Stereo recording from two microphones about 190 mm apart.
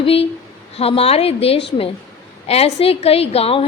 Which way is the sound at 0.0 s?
30° left (ahead or behind).